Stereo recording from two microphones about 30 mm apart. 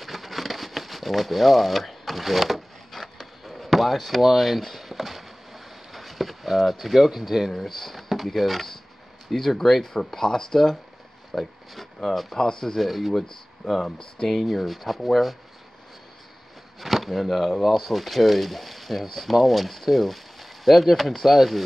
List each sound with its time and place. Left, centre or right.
0.0 s a sound: centre
7.5 s speech: centre
9.9 s speech: centre
11.3 s a sound: centre
12.0 s speech: centre
12.7 s speech: centre
14.3 s speech: centre
16.8 s speech: centre